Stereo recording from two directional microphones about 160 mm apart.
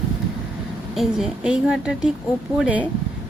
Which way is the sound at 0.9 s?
5° right (ahead or behind).